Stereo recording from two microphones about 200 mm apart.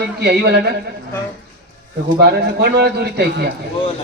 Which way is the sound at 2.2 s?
55° right (ahead or behind).